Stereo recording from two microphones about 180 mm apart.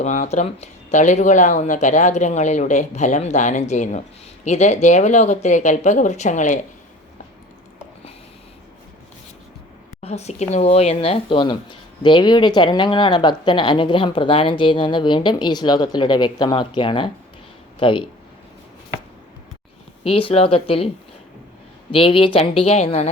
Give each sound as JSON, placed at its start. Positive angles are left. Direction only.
{"t": 0.0, "sound": "speech", "side_deg": 40}
{"t": 10.0, "sound": "a woman's voice", "side_deg": 35}
{"t": 20.1, "sound": "speech", "side_deg": 30}
{"t": 21.9, "sound": "speech", "side_deg": 30}